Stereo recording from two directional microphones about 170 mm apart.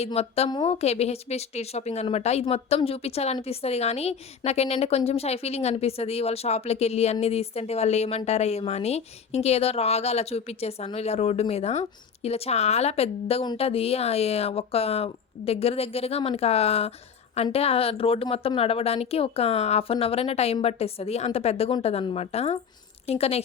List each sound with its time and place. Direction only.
0.0 s a woman's voice: 35° left (ahead or behind)